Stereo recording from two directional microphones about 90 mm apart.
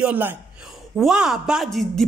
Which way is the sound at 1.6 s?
5° left (ahead or behind).